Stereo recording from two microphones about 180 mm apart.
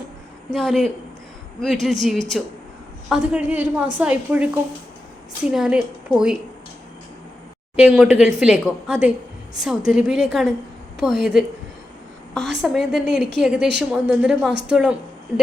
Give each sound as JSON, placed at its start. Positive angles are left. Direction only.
{"t": 0.5, "sound": "a woman's voice", "side_deg": 0}
{"t": 5.5, "sound": "a woman's voice", "side_deg": -5}
{"t": 7.8, "sound": "a woman's voice", "side_deg": -5}
{"t": 13.1, "sound": "a woman's voice", "side_deg": -70}
{"t": 13.4, "sound": "a woman's voice", "side_deg": -5}